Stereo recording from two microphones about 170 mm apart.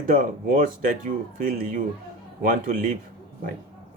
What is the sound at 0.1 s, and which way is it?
Speech, 50° right (ahead or behind).